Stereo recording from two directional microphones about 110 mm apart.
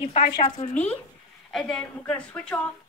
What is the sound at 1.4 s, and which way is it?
A woman's voice, 5° left (ahead or behind).